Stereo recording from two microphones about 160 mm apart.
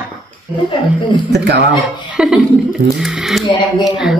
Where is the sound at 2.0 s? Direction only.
5° right (ahead or behind).